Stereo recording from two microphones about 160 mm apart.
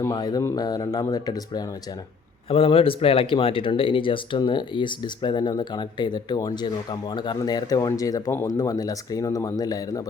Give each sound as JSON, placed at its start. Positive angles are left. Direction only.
{"t": 0.0, "sound": "speech", "side_deg": 25}
{"t": 2.5, "sound": "speech", "side_deg": 35}